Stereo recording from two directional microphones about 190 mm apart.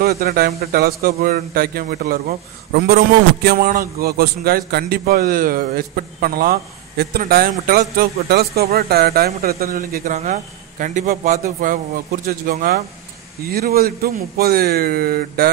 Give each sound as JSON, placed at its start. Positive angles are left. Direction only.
{"t": 0.0, "sound": "a man's voice", "side_deg": -50}